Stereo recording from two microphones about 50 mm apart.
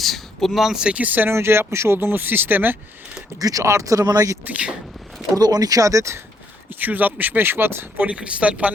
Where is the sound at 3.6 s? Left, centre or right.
Right.